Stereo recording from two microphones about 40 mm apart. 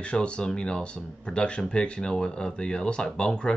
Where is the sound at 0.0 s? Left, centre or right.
Left.